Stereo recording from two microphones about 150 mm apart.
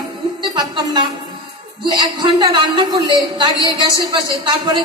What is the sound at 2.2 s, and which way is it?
A woman's voice, 30° right (ahead or behind).